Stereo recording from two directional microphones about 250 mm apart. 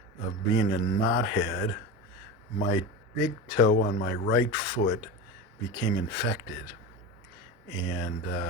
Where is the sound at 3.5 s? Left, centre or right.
Left.